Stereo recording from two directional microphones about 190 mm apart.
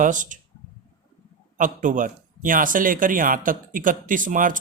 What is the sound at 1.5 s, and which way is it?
Speech, 40° right (ahead or behind).